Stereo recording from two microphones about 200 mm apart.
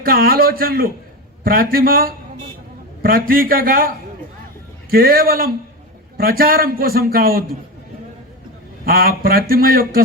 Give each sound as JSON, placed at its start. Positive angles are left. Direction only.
{"t": 0.0, "sound": "a man's voice", "side_deg": -50}
{"t": 8.8, "sound": "a man's voice", "side_deg": -45}